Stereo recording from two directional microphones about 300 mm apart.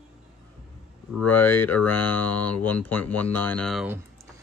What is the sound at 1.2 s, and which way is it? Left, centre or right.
Speech, centre.